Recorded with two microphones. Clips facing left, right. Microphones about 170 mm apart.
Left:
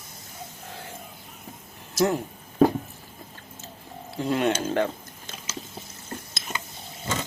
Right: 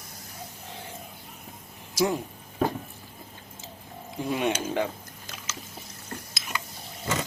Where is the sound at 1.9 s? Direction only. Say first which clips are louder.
Left 2 dB; 10° right (ahead or behind).